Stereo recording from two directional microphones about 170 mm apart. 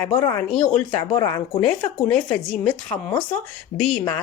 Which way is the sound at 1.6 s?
5° left (ahead or behind).